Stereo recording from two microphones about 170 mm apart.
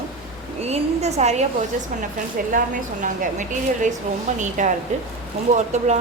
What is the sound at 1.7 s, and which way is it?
Speech, 50° right (ahead or behind).